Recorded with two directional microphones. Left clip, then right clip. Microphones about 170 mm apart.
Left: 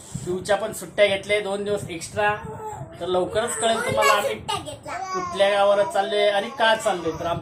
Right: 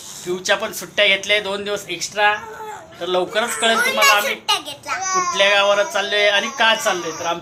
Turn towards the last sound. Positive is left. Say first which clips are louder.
# right 3 dB
turn(degrees=-5)  # may be behind; listen again after turning